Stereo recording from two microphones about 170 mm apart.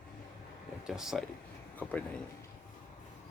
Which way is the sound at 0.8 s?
5° right (ahead or behind).